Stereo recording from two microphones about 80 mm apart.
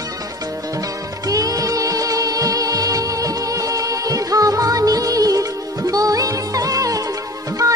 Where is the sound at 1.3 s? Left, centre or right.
Right.